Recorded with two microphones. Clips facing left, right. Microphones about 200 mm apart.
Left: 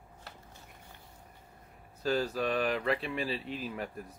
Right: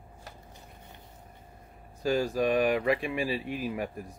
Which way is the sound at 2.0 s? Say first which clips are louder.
Right 4 dB; 10° right (ahead or behind).